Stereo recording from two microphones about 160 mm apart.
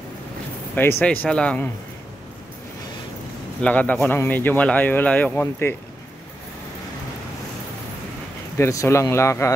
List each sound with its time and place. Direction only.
0.7 s a man's voice: 15° left (ahead or behind)
3.6 s a man's voice: 10° left (ahead or behind)
8.5 s a man's voice: 15° left (ahead or behind)